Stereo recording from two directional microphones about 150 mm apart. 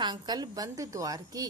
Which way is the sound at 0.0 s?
25° right (ahead or behind).